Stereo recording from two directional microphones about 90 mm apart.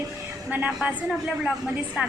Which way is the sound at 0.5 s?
15° right (ahead or behind).